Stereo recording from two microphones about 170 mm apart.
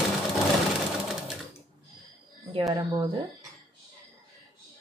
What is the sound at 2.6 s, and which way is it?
Speech, 25° right (ahead or behind).